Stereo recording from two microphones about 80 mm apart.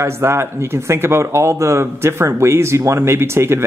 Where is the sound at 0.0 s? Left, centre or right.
Right.